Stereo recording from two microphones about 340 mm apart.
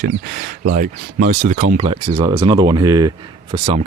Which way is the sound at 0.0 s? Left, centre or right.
Right.